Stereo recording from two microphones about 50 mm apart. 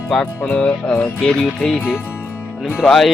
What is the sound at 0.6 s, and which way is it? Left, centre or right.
Music, left.